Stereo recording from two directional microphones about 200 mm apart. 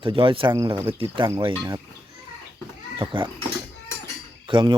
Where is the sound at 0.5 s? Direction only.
15° right (ahead or behind).